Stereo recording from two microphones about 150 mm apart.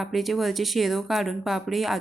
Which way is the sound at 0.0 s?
Centre (ahead or behind).